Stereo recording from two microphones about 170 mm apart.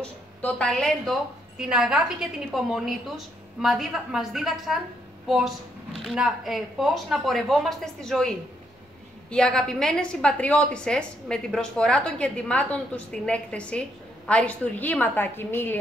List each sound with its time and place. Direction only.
0.0 s a woman's voice: 5° left (ahead or behind)
6.0 s a woman's voice: centre (ahead or behind)